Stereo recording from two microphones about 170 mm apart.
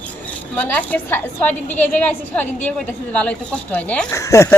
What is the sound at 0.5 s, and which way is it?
A woman's voice, 10° left (ahead or behind).